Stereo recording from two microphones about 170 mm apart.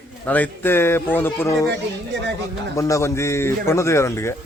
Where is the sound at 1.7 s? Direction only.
90° right.